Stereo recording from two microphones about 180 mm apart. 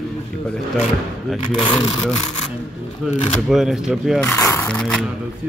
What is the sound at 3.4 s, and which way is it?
Speech, centre (ahead or behind).